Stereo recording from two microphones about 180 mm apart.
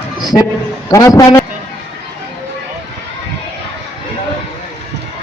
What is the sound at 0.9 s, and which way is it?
Speech, 20° left (ahead or behind).